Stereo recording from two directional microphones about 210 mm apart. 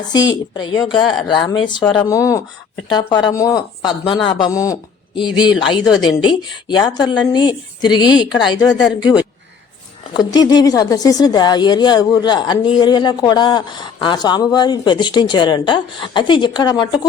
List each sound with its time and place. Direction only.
0.5 s speech: 20° left (ahead or behind)